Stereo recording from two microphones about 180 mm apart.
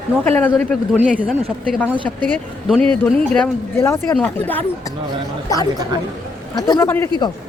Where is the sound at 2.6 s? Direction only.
5° left (ahead or behind).